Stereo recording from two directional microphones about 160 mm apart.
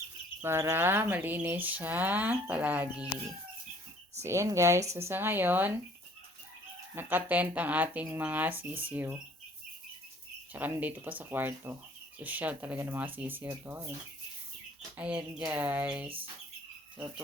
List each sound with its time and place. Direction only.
0.4 s speech: 15° right (ahead or behind)
4.2 s speech: 20° right (ahead or behind)
6.9 s speech: 10° right (ahead or behind)
10.5 s speech: 10° right (ahead or behind)
14.9 s speech: 10° right (ahead or behind)